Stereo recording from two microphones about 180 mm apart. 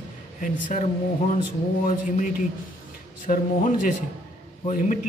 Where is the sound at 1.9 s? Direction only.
45° left (ahead or behind).